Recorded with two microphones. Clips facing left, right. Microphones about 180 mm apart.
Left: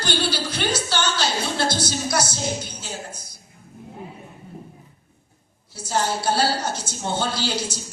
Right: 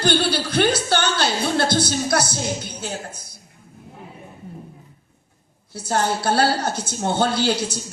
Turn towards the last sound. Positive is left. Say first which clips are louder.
# right 5 dB
turn(degrees=-55)  # may be behind; listen again after turning